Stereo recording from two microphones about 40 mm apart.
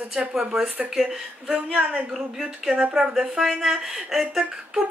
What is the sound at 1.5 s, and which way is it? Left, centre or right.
Speech, right.